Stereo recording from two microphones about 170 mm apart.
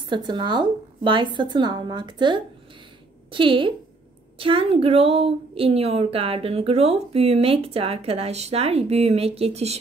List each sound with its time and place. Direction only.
0.0 s a woman's voice: 25° right (ahead or behind)